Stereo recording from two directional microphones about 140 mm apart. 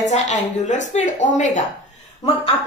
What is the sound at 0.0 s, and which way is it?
A woman's voice, 55° left (ahead or behind).